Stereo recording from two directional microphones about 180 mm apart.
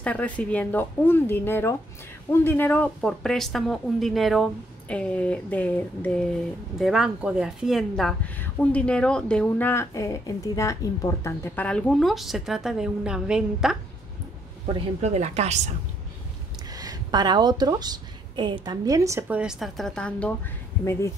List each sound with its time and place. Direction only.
0.0 s speech: 5° left (ahead or behind)
6.8 s speech: centre (ahead or behind)
15.0 s a woman's voice: 40° right (ahead or behind)
16.7 s speech: 20° right (ahead or behind); by 21.1 s 15° left (ahead or behind)